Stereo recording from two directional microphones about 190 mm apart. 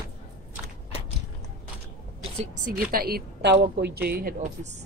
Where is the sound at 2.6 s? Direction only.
50° right (ahead or behind).